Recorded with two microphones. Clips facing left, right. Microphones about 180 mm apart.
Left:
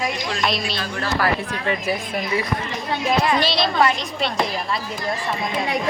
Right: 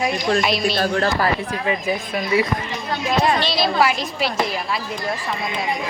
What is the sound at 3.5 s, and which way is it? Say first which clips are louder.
Speech: right 1 dB; 5° right (ahead or behind).